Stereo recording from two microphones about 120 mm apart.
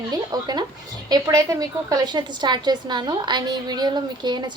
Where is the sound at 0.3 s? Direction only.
35° right (ahead or behind).